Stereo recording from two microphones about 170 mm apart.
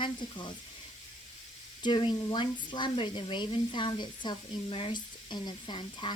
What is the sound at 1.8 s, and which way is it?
Speech, 30° left (ahead or behind).